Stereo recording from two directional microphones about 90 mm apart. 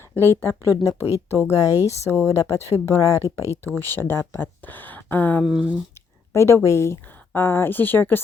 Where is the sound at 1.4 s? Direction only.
40° left (ahead or behind).